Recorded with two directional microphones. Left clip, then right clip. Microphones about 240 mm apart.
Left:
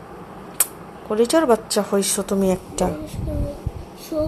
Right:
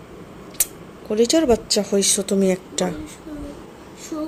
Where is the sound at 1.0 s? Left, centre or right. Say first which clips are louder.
Even; right.